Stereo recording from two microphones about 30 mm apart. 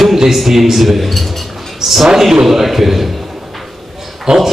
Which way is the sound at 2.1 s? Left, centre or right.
Centre.